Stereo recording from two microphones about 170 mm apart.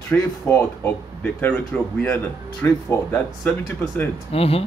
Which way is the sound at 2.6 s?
15° left (ahead or behind).